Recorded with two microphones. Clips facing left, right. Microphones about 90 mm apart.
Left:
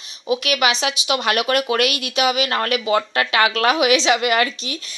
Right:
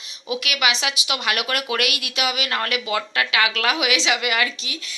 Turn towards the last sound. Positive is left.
turn(degrees=40)  # may be behind; listen again after turning